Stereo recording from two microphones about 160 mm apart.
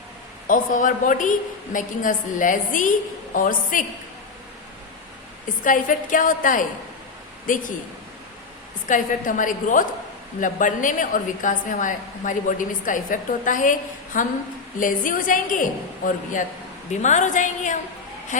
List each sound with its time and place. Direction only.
0.4 s a woman's voice: 55° left (ahead or behind)
5.6 s a woman's voice: 55° left (ahead or behind)
8.9 s a woman's voice: 55° left (ahead or behind)
16.9 s a woman's voice: 45° left (ahead or behind)